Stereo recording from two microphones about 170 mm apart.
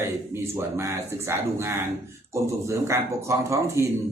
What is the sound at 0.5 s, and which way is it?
Speech, 15° right (ahead or behind).